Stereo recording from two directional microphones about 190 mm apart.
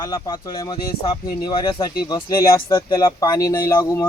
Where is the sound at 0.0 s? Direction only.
20° left (ahead or behind).